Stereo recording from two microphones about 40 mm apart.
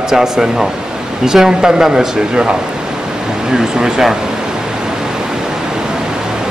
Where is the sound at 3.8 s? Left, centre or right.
Centre.